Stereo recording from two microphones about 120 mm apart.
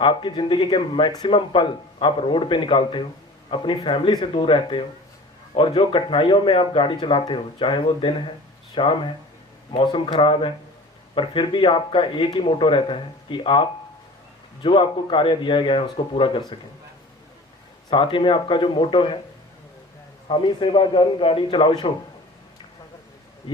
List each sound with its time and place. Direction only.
0.0 s a man's voice: 40° left (ahead or behind)
17.9 s a man's voice: 45° left (ahead or behind)
20.2 s a man's voice: 45° left (ahead or behind)